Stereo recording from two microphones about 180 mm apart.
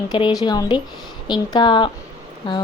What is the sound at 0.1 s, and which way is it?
Speech, 25° left (ahead or behind).